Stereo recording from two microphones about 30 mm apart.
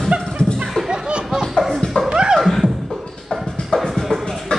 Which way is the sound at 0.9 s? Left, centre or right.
Right.